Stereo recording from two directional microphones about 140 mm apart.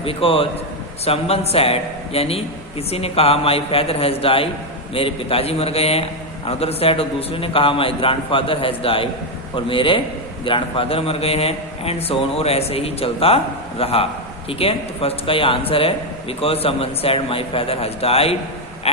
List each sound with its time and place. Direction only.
0.0 s a man's voice: 40° left (ahead or behind)